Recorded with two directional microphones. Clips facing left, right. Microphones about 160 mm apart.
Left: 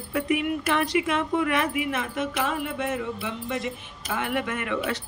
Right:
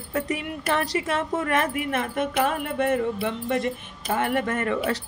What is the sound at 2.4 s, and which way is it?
Music, 55° right (ahead or behind).